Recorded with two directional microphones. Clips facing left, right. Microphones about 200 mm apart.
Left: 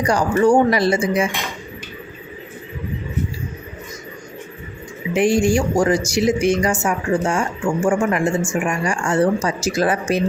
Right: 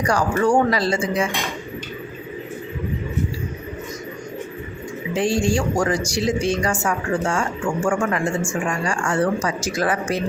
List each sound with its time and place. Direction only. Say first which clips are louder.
0.1 s speech: left 3 dB; 20° left (ahead or behind)
5.1 s speech: left 4 dB; 20° left (ahead or behind)